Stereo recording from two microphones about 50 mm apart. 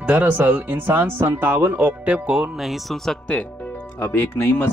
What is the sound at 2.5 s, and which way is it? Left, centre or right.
Speech, centre.